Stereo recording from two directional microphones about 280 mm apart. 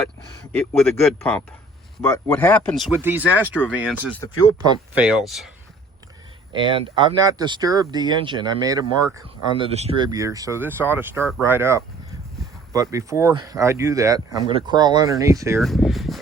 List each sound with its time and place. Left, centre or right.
0.5 s speech: centre
6.5 s speech: centre
15.6 s speech: centre